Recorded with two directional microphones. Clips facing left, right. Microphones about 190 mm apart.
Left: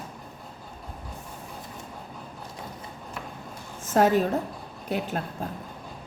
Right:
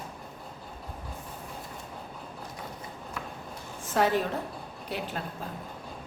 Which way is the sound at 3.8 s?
45° left (ahead or behind).